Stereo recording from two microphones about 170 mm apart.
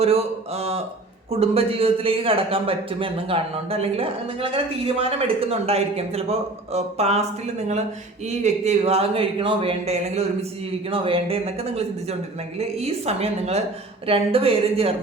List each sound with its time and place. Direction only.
0.0 s speech: 35° right (ahead or behind)